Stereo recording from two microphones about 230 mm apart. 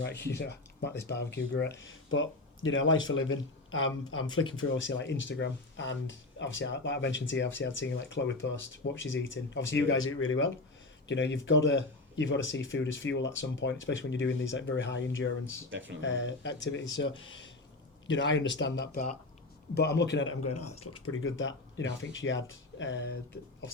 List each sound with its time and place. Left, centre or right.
0.0 s speech: left
20.7 s speech: left
21.0 s speech: left